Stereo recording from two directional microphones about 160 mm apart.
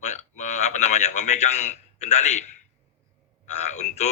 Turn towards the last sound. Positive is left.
turn(degrees=45)  # may be behind; listen again after turning